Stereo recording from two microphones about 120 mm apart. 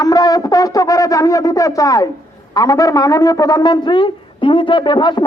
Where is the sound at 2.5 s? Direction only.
30° left (ahead or behind).